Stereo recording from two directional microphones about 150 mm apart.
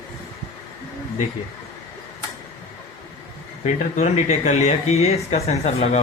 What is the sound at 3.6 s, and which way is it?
Speech, 50° left (ahead or behind).